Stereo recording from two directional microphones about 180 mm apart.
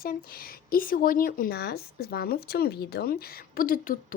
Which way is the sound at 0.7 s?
50° left (ahead or behind).